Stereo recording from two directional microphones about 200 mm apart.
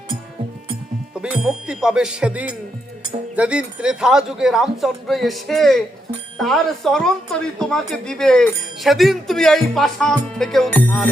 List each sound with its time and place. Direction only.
1.2 s a woman's voice: 5° right (ahead or behind)